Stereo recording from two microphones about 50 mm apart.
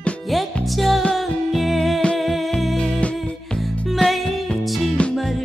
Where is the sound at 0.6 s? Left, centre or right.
Centre.